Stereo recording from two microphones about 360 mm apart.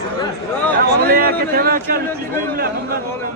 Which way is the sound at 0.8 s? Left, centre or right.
Right.